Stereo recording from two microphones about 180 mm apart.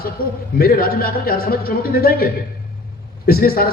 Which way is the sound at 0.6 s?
55° left (ahead or behind).